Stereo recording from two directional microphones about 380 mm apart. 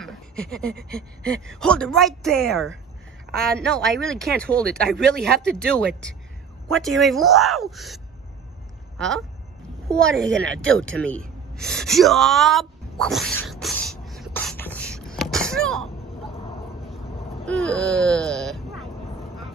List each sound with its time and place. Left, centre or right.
0.0 s a sound: centre
1.6 s speech: centre
10.2 s speech: right
11.1 s gasp: centre
17.5 s speech: centre